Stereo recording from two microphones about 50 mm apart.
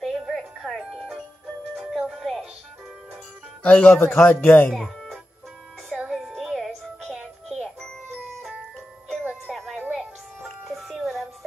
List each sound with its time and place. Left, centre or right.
0.0 s music: centre
0.7 s music: centre
3.6 s speech: left
3.9 s a man's voice: left
4.6 s music: centre
5.9 s music: centre
6.3 s music: centre
9.5 s a sound: centre
10.7 s music: centre